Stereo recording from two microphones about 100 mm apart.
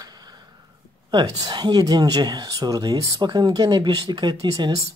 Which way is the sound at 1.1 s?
50° right (ahead or behind).